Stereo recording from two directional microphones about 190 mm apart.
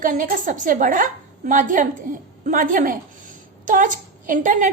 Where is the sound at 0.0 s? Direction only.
45° right (ahead or behind).